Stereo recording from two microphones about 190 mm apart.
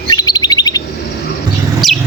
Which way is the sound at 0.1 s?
20° left (ahead or behind).